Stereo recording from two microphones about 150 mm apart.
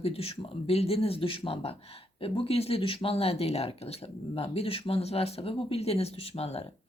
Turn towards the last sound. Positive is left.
turn(degrees=45)  # may be behind; listen again after turning